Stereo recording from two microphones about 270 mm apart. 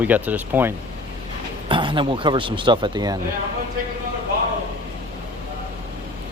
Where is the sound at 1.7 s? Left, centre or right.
Centre.